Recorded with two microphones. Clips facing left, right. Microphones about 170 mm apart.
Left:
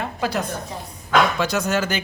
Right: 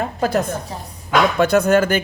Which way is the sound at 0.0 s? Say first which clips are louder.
Right 5 dB; 45° right (ahead or behind).